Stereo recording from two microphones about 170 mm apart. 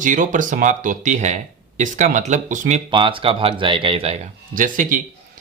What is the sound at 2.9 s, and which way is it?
Speech, 30° right (ahead or behind).